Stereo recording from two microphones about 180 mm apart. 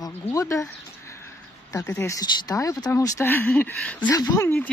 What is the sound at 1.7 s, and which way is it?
Speech, 15° left (ahead or behind).